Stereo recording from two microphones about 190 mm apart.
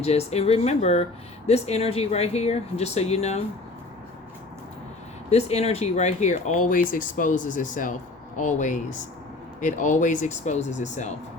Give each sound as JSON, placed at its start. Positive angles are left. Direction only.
{"t": 0.0, "sound": "speech", "side_deg": 35}
{"t": 5.3, "sound": "speech", "side_deg": 35}